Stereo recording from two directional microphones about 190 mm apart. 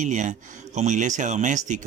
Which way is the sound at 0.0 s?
40° right (ahead or behind).